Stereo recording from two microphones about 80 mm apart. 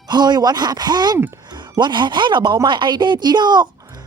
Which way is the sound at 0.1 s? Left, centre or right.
Right.